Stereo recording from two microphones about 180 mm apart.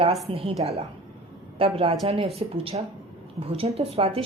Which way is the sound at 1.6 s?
30° right (ahead or behind).